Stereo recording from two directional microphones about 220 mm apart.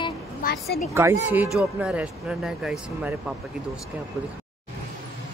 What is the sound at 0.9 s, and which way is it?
Speech, 10° right (ahead or behind).